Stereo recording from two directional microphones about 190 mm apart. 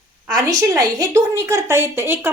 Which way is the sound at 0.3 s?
20° right (ahead or behind).